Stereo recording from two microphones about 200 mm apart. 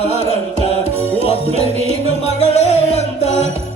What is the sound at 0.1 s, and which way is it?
Music, 30° right (ahead or behind).